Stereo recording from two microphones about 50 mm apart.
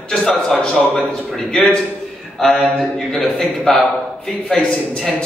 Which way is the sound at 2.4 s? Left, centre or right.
Centre.